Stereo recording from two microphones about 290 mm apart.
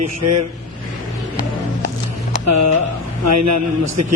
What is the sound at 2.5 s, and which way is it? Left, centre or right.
A man's voice, right.